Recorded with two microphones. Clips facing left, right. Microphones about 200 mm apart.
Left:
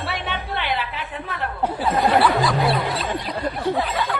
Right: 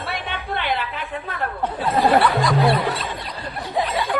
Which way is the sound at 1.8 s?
Centre (ahead or behind).